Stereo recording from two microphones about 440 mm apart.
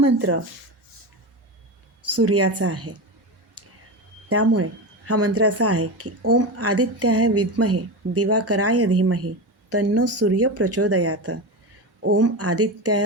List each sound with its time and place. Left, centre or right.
0.0 s a woman's voice: right
2.0 s a woman's voice: right
4.3 s a woman's voice: right